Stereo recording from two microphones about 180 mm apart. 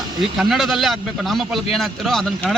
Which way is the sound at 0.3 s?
Centre (ahead or behind).